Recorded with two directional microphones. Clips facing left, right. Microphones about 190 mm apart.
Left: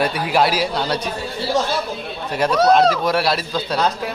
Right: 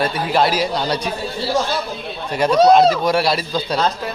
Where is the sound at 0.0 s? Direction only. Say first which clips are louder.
Even; 10° left (ahead or behind).